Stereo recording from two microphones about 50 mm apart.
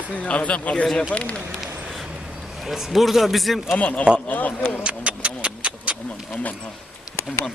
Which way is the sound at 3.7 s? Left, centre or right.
Left.